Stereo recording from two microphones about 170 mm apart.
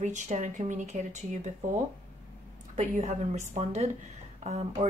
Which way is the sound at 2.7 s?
40° right (ahead or behind).